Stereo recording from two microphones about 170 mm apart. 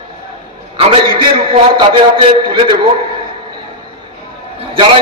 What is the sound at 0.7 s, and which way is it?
A man's voice, 30° right (ahead or behind).